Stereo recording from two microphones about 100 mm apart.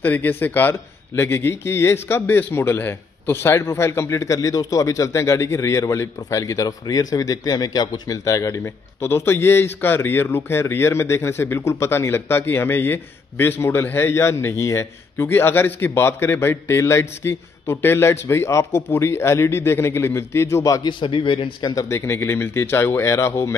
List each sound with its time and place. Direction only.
0.0 s a man's voice: 20° left (ahead or behind); by 20.9 s 35° left (ahead or behind)
21.0 s a man's voice: 55° left (ahead or behind)
21.7 s a man's voice: 30° left (ahead or behind)